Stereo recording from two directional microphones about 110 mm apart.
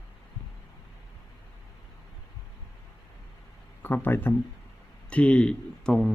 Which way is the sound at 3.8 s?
20° left (ahead or behind).